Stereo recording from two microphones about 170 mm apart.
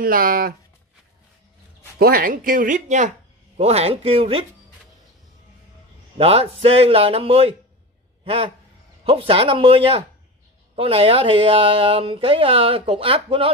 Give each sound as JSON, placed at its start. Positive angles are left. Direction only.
{"t": 0.0, "sound": "speech", "side_deg": -60}
{"t": 2.0, "sound": "speech", "side_deg": -60}
{"t": 6.1, "sound": "speech", "side_deg": -35}
{"t": 9.0, "sound": "speech", "side_deg": -30}